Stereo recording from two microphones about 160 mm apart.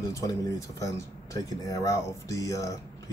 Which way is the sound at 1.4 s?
20° left (ahead or behind).